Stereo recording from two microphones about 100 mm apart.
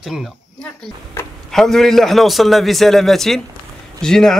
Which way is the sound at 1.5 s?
5° left (ahead or behind).